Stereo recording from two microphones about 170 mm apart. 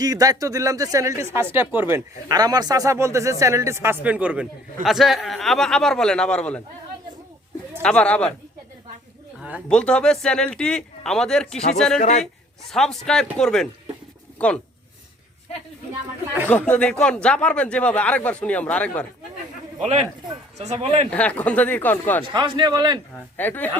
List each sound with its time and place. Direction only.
0.0 s speech: 20° right (ahead or behind); by 6.6 s 5° left (ahead or behind)
7.8 s speech: 5° left (ahead or behind)
9.6 s speech: 5° left (ahead or behind)
11.9 s a man's voice: 40° left (ahead or behind)
12.2 s a man's voice: centre (ahead or behind)
16.5 s speech: 10° left (ahead or behind)
19.8 s speech: 40° right (ahead or behind)
21.1 s speech: 10° left (ahead or behind)
22.2 s a man's voice: 30° right (ahead or behind)
23.4 s speech: 10° left (ahead or behind)